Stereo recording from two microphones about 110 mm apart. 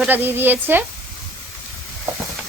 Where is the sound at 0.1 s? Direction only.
20° right (ahead or behind).